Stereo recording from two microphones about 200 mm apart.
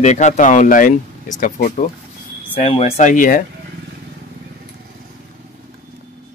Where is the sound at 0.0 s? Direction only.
35° left (ahead or behind).